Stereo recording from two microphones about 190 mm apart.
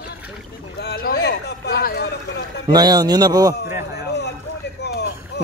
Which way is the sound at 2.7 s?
20° right (ahead or behind).